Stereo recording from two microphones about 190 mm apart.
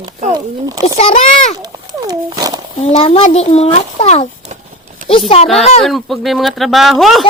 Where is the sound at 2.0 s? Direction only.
20° right (ahead or behind).